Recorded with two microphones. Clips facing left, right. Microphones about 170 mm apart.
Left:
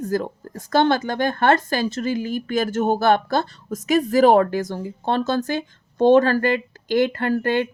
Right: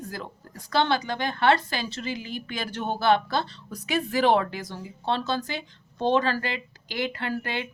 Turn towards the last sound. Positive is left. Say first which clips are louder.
# left 10 dB
turn(degrees=45)  # may be behind; listen again after turning